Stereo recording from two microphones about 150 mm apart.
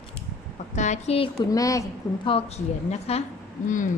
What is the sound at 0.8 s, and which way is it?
Speech, 50° left (ahead or behind).